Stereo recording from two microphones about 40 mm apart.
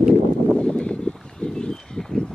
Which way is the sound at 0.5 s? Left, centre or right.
Left.